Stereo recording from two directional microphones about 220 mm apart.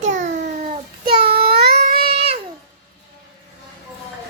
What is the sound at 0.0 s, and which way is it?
Babbling, 35° right (ahead or behind).